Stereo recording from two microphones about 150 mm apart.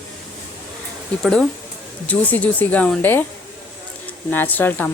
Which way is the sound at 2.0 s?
10° left (ahead or behind).